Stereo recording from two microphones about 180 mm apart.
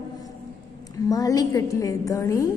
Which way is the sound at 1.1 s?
20° left (ahead or behind).